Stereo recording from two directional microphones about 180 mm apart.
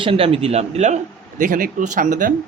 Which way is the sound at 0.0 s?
30° right (ahead or behind).